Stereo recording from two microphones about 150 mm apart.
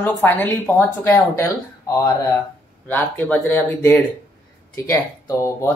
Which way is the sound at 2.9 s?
10° left (ahead or behind).